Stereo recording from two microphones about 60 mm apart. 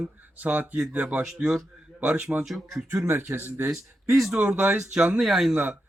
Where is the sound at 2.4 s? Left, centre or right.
Centre.